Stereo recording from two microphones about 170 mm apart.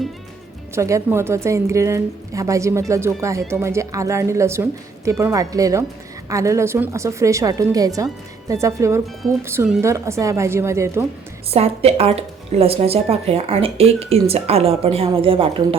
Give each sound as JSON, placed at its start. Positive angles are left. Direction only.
{"t": 0.8, "sound": "a woman's voice", "side_deg": -15}
{"t": 11.5, "sound": "speech", "side_deg": -35}